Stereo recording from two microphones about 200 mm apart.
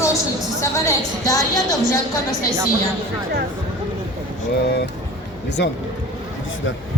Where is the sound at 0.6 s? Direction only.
15° left (ahead or behind).